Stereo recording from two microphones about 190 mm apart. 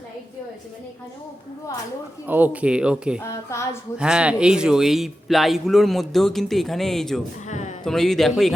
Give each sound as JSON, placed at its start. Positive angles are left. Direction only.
{"t": 2.2, "sound": "a man's voice", "side_deg": -10}
{"t": 3.5, "sound": "speech", "side_deg": 15}
{"t": 3.9, "sound": "a man's voice", "side_deg": -5}
{"t": 7.4, "sound": "speech", "side_deg": 40}
{"t": 7.9, "sound": "a man's voice", "side_deg": 0}